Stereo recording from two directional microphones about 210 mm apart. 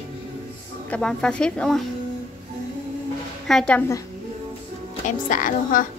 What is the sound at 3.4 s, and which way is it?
Speech, 5° left (ahead or behind).